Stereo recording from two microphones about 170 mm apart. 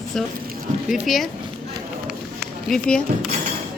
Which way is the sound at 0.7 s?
45° right (ahead or behind).